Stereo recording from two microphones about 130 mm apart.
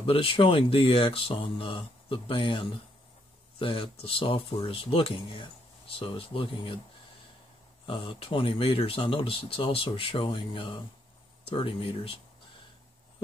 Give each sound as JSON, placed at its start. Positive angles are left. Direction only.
{"t": 0.0, "sound": "speech", "side_deg": 45}
{"t": 7.8, "sound": "speech", "side_deg": 40}